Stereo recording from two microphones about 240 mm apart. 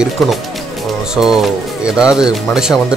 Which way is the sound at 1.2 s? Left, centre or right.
Centre.